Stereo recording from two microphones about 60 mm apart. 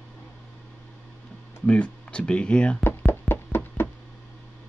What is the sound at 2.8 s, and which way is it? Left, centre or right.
Knock, left.